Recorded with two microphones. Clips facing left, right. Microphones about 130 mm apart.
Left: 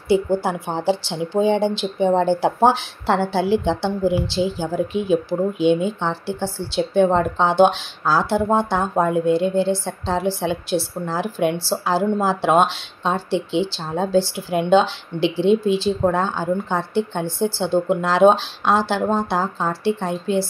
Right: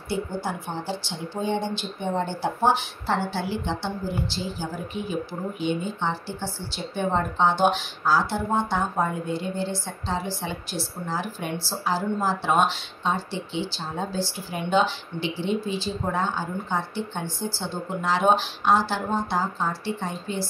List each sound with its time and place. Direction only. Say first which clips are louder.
0.1 s speech: left 10 dB; 90° left
14.3 s speech: left 8 dB; 90° left; by 17.5 s 75° left (ahead or behind)
17.6 s speech: left 11 dB; 85° left